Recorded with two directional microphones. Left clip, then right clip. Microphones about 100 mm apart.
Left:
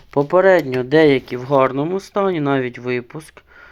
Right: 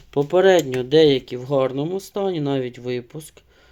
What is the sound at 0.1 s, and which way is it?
Speech, 20° right (ahead or behind).